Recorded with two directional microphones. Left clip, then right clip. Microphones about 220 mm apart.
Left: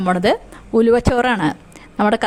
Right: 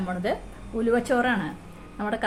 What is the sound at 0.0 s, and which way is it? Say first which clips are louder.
Speech: left 12 dB; 50° left (ahead or behind).